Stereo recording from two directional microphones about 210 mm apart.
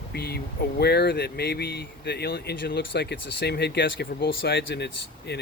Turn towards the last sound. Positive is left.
turn(degrees=55)  # may be behind; listen again after turning